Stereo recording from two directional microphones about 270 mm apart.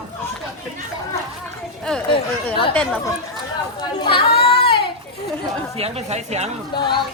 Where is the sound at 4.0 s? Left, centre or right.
Centre.